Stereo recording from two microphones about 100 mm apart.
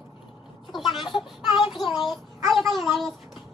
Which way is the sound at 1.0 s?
55° left (ahead or behind).